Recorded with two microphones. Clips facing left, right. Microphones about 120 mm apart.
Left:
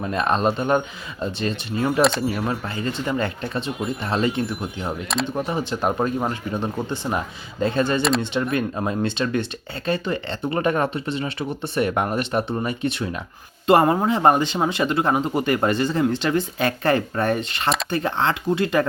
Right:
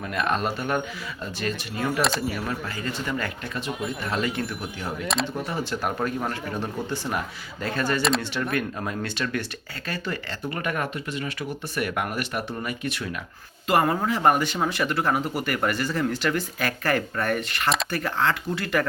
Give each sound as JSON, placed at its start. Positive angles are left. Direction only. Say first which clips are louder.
{"t": 0.0, "sound": "speech", "louder": "left 5 dB", "side_deg": 30}
{"t": 2.0, "sound": "speech", "louder": "left 7 dB", "side_deg": 0}
{"t": 2.5, "sound": "speech", "louder": "left 4 dB", "side_deg": 25}
{"t": 5.1, "sound": "speech", "louder": "left 1 dB", "side_deg": 0}
{"t": 5.5, "sound": "speech", "louder": "left 5 dB", "side_deg": 20}